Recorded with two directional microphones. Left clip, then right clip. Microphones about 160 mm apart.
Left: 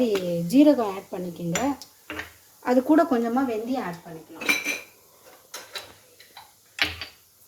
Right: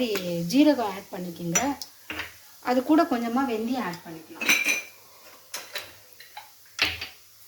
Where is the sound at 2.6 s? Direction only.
65° left (ahead or behind).